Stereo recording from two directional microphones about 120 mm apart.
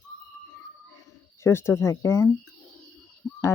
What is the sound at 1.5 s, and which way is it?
Speech, 20° left (ahead or behind).